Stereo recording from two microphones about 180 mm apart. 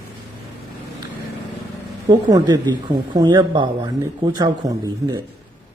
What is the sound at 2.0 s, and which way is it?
Speech, 20° right (ahead or behind).